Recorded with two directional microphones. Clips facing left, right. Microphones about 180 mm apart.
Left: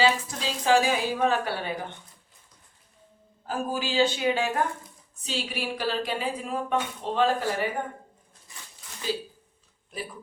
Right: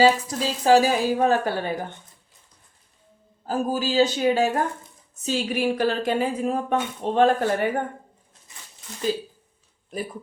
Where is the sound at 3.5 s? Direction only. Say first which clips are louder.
Right 5 dB; 40° right (ahead or behind).